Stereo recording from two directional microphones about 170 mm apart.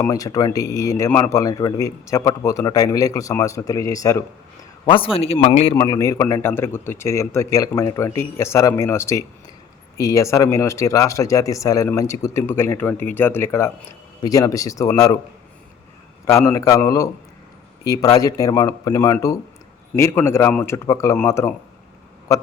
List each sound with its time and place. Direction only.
0.0 s speech: 20° left (ahead or behind)
4.9 s speech: 30° left (ahead or behind)
5.7 s speech: 20° left (ahead or behind)
16.2 s speech: 15° left (ahead or behind)